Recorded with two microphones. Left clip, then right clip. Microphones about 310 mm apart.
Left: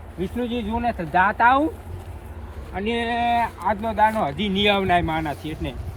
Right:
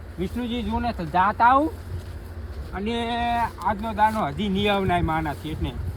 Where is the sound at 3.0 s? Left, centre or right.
Centre.